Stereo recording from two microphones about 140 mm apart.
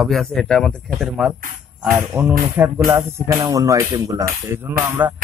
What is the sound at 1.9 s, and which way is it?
A man's voice, 15° right (ahead or behind).